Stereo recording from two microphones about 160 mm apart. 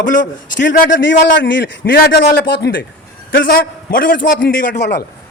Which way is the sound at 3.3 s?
65° left (ahead or behind).